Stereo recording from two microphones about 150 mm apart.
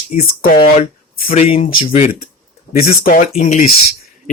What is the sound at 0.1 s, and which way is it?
Speech, 45° left (ahead or behind).